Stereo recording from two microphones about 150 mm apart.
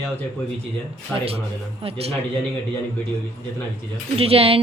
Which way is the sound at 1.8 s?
40° right (ahead or behind).